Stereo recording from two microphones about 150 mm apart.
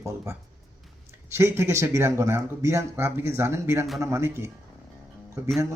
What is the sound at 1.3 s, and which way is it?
Speech, 20° right (ahead or behind).